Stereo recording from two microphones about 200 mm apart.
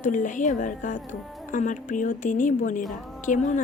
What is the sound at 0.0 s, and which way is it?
A woman's voice, 40° left (ahead or behind).